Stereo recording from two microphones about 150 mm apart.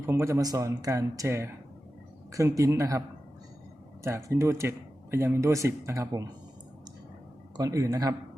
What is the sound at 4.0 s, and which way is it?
Speech, 20° right (ahead or behind).